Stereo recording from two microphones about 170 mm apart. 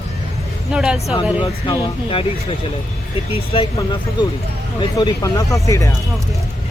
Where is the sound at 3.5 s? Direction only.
30° left (ahead or behind).